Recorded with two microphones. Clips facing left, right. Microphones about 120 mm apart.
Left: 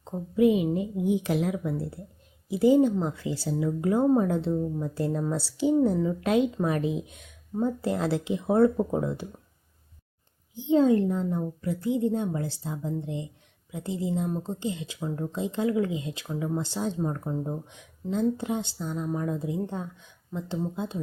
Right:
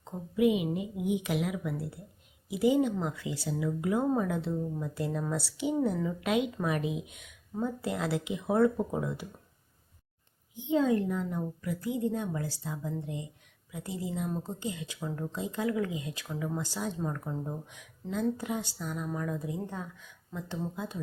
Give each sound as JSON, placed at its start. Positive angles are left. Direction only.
{"t": 0.0, "sound": "a woman's voice", "side_deg": 35}
{"t": 10.5, "sound": "speech", "side_deg": 30}